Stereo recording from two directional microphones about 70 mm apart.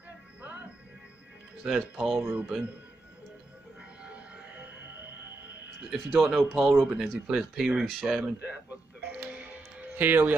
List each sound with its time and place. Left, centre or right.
1.6 s speech: centre
4.0 s music: centre
5.9 s speech: centre
8.4 s music: right